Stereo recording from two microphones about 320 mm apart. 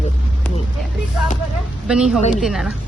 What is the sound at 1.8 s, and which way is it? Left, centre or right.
Speech, centre.